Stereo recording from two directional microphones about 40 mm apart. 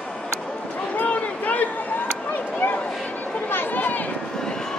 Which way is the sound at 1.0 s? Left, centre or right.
Left.